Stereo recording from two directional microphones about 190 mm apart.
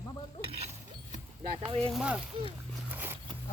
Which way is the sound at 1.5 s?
30° right (ahead or behind).